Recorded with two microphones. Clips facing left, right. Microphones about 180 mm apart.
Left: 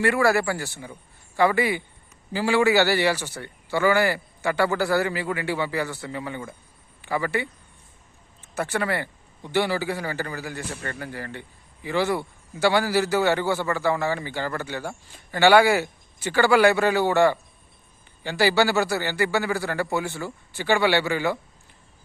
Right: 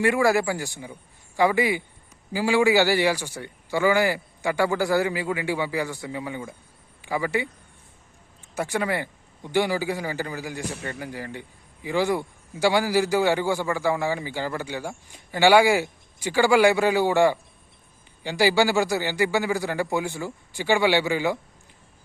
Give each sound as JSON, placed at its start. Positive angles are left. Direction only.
{"t": 0.0, "sound": "a man's voice", "side_deg": -15}
{"t": 8.5, "sound": "a man's voice", "side_deg": -15}